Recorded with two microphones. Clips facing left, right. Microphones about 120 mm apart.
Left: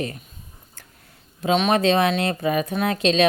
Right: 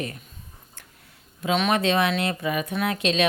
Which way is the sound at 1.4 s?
30° left (ahead or behind).